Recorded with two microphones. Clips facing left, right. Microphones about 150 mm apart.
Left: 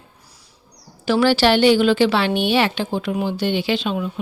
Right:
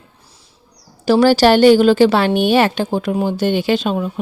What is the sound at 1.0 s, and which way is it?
A woman's voice, 40° right (ahead or behind).